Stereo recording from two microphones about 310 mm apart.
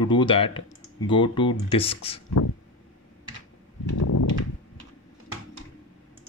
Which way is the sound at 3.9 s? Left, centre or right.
Left.